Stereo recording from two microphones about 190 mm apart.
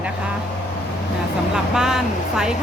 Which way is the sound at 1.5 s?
5° right (ahead or behind).